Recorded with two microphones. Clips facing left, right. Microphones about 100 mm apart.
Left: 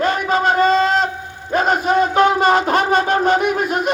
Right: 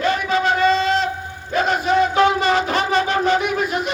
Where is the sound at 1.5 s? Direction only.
45° left (ahead or behind).